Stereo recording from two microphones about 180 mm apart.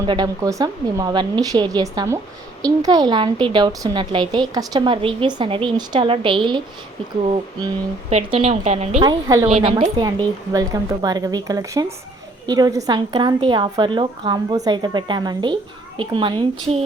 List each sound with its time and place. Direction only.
0.0 s a woman's voice: 25° right (ahead or behind)
8.1 s a woman's voice: 35° right (ahead or behind)
9.0 s a woman's voice: 20° right (ahead or behind)
9.6 s a woman's voice: 30° right (ahead or behind)
10.5 s a woman's voice: 20° right (ahead or behind)